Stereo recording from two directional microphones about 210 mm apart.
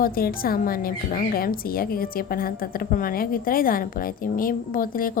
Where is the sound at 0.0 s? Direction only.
45° left (ahead or behind).